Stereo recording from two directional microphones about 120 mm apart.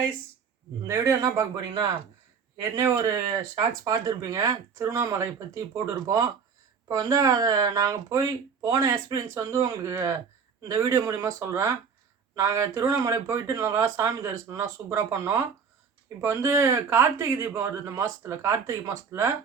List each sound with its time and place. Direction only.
0.9 s speech: 25° right (ahead or behind)